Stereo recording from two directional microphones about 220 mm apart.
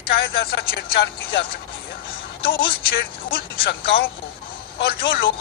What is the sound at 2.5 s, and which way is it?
Speech, 45° left (ahead or behind).